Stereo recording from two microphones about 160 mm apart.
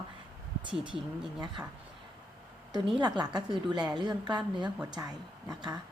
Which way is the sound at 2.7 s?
30° right (ahead or behind).